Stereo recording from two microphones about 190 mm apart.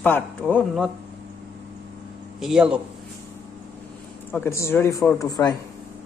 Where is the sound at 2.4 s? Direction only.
5° right (ahead or behind).